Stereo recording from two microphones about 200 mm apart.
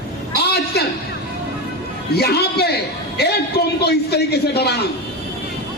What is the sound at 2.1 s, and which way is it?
Speech, 55° left (ahead or behind).